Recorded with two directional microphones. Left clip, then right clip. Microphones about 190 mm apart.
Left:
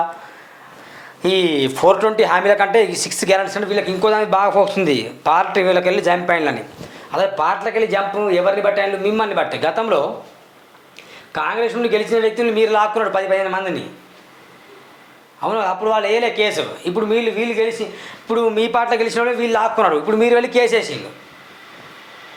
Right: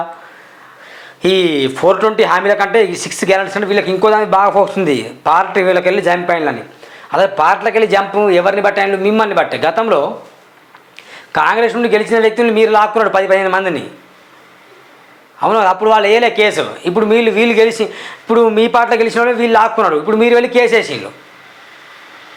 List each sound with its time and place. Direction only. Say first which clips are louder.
0.9 s a man's voice: right 5 dB; 25° right (ahead or behind); by 6.6 s 10° right (ahead or behind)
7.1 s speech: right 6 dB; 25° right (ahead or behind)
11.1 s speech: right 9 dB; 35° right (ahead or behind)
15.4 s a man's voice: right 8 dB; 35° right (ahead or behind)